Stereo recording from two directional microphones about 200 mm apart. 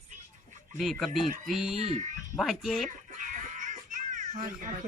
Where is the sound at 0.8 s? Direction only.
Centre (ahead or behind).